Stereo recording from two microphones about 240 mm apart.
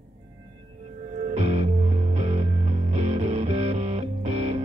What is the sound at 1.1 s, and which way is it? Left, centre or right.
Music, right.